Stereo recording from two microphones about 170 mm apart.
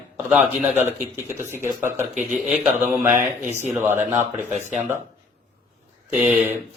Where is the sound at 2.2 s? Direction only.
Centre (ahead or behind).